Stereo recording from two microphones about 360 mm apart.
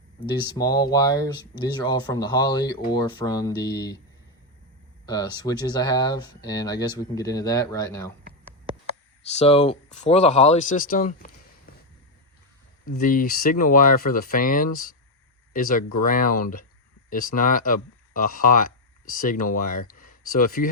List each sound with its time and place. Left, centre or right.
0.2 s speech: centre
5.0 s speech: centre
9.4 s speech: centre
12.8 s speech: left